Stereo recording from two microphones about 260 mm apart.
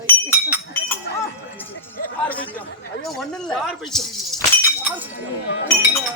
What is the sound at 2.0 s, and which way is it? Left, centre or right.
Speech, left.